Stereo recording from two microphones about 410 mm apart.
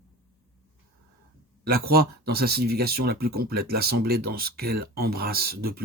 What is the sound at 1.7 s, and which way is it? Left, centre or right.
Speech, right.